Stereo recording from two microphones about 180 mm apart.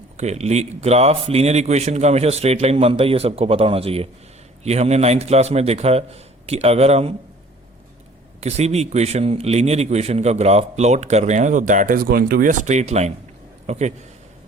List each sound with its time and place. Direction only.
0.2 s a man's voice: 35° right (ahead or behind)
8.4 s a man's voice: 35° right (ahead or behind)